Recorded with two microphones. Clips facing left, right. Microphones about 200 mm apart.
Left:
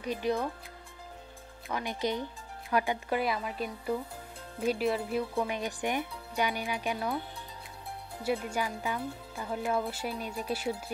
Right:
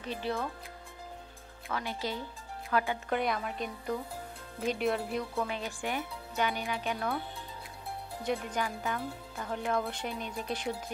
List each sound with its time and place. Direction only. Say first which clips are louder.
0.0 s speech: left 4 dB; 15° left (ahead or behind)
1.7 s speech: left 3 dB; 15° left (ahead or behind)
3.2 s speech: left 1 dB; 5° left (ahead or behind)
5.3 s speech: left 3 dB; 15° left (ahead or behind)
8.2 s speech: left 2 dB; 10° left (ahead or behind)